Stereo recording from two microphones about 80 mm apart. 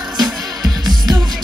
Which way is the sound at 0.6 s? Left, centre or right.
Right.